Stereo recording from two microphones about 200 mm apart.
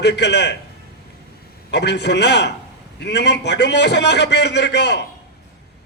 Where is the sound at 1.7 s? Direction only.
60° left (ahead or behind).